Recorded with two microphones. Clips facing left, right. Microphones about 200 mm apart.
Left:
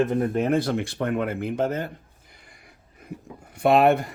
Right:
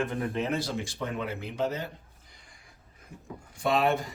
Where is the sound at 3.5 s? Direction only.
60° left (ahead or behind).